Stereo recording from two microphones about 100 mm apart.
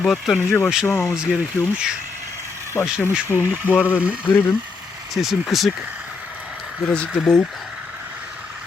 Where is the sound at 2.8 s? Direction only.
25° left (ahead or behind).